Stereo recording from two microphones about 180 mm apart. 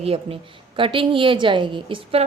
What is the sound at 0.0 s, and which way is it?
A woman's voice, 35° right (ahead or behind).